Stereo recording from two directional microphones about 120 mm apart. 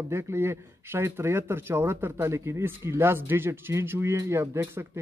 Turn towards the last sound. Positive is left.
turn(degrees=-20)  # may be behind; listen again after turning